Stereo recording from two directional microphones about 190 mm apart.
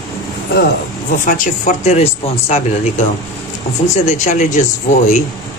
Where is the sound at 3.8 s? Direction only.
40° left (ahead or behind).